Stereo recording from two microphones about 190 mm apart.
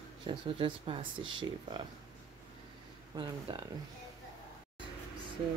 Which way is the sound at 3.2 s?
25° right (ahead or behind).